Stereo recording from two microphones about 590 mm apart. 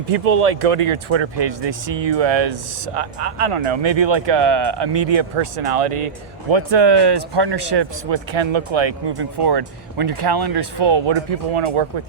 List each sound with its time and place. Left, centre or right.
0.1 s speech: right
6.5 s speech: right